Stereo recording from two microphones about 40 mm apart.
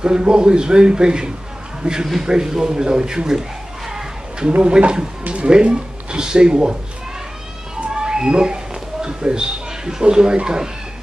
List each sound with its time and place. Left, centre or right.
0.0 s a man's voice: right
3.9 s a sound: right
4.6 s speech: right
8.0 s speech: centre